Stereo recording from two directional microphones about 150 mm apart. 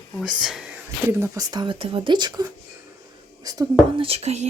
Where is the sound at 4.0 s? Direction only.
45° right (ahead or behind).